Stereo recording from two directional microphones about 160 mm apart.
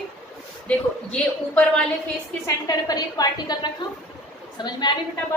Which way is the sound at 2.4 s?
25° left (ahead or behind).